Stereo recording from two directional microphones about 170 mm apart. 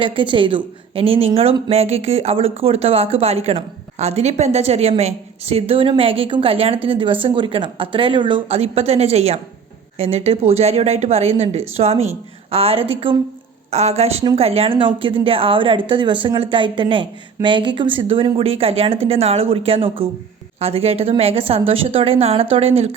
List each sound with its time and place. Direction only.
0.0 s a woman's voice: 30° right (ahead or behind)